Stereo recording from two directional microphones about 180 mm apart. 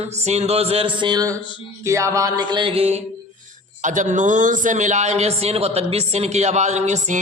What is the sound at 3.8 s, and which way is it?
A man's voice, 45° right (ahead or behind).